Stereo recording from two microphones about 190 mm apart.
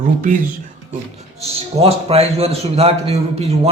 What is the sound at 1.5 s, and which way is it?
A man's voice, 30° right (ahead or behind).